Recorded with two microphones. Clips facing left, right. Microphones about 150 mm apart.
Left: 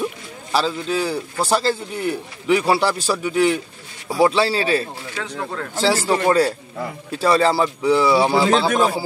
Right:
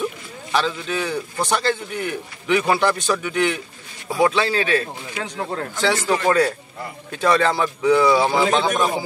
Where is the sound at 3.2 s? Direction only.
35° left (ahead or behind).